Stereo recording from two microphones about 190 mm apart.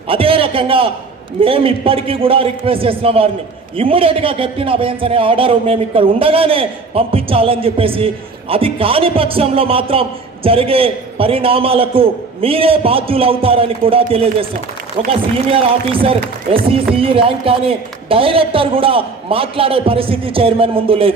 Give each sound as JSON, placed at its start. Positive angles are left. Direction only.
{"t": 0.1, "sound": "a man's voice", "side_deg": -30}
{"t": 15.4, "sound": "a man's voice", "side_deg": -30}